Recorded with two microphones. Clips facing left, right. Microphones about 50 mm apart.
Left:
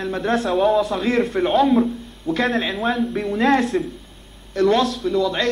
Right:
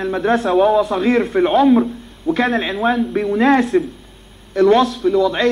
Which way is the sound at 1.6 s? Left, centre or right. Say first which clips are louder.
Right 4 dB; centre.